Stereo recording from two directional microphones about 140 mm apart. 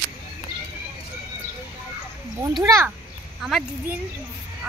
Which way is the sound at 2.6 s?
20° right (ahead or behind).